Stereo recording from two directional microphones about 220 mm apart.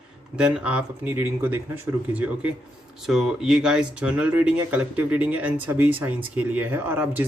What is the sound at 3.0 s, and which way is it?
Speech, centre (ahead or behind).